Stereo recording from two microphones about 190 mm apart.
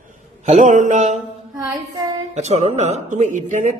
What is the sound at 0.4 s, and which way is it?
Speech, 40° right (ahead or behind).